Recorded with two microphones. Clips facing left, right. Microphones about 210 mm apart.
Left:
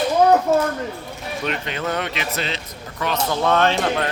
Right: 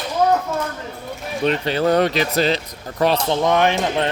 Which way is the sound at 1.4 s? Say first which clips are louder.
Right 8 dB; 35° right (ahead or behind).